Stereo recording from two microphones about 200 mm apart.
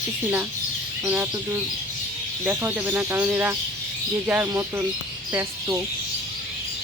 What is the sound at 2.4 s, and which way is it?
Speech, 5° right (ahead or behind).